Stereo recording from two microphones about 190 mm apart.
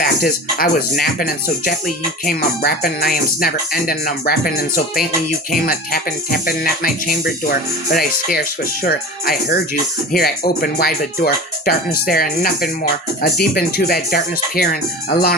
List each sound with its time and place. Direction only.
0.0 s speech: 50° left (ahead or behind)
8.8 s speech: 50° left (ahead or behind)